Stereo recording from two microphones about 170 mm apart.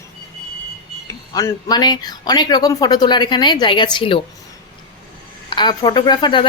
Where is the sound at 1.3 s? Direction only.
20° left (ahead or behind).